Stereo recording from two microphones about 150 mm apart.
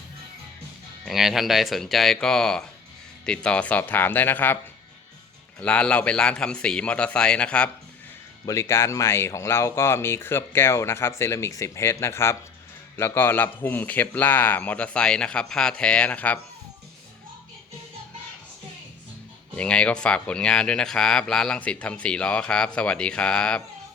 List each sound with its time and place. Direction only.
1.0 s speech: centre (ahead or behind)
5.5 s speech: 5° left (ahead or behind)
8.4 s speech: 20° left (ahead or behind)
19.5 s speech: 5° left (ahead or behind)